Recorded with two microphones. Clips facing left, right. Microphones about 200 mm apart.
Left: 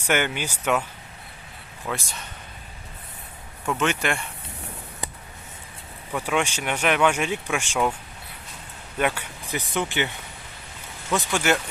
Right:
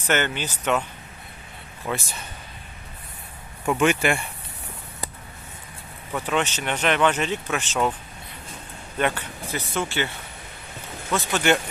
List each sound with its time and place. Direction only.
0.0 s speech: 10° left (ahead or behind)
1.9 s speech: centre (ahead or behind)
3.7 s speech: 10° right (ahead or behind)
6.1 s speech: 10° left (ahead or behind)
9.0 s speech: 10° left (ahead or behind)